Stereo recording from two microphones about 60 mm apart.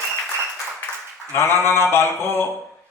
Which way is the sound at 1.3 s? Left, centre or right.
Left.